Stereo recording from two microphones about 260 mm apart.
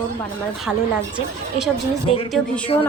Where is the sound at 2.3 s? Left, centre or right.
Centre.